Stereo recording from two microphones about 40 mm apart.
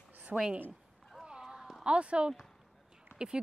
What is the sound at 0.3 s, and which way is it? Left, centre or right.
Speech, centre.